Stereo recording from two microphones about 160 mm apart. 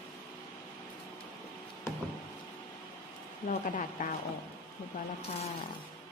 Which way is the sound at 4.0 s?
55° left (ahead or behind).